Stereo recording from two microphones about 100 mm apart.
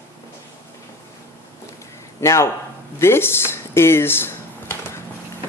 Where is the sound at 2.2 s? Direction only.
30° left (ahead or behind).